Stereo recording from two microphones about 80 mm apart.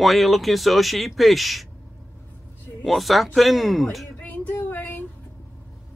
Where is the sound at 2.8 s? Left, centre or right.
Centre.